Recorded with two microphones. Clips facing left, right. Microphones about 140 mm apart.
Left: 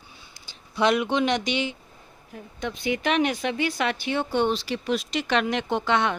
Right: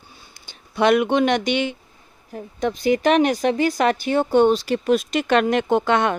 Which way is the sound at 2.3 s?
40° right (ahead or behind).